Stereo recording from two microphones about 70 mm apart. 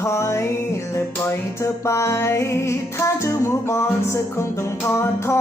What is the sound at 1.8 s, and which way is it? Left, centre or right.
Music, left.